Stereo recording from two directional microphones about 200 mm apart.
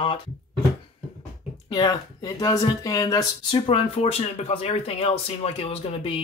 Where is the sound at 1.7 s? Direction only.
20° left (ahead or behind).